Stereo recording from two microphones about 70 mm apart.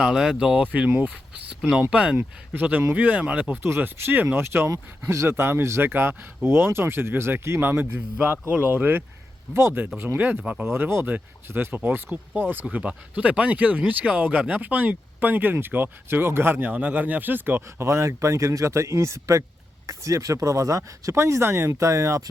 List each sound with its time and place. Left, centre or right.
0.0 s speech: centre; by 1.1 s right
1.5 s a sound: centre
1.9 s speech: centre
3.8 s speech: right
9.5 s speech: right
10.2 s speech: right
10.4 s speech: centre
10.7 s speech: right
17.8 s speech: right